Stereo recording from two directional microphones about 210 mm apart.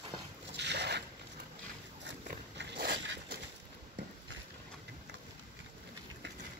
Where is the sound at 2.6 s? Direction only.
55° right (ahead or behind).